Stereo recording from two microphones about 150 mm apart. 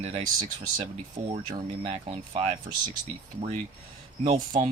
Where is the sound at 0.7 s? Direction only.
60° right (ahead or behind).